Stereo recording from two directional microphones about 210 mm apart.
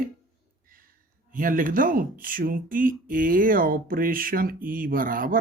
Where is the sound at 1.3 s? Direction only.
40° right (ahead or behind).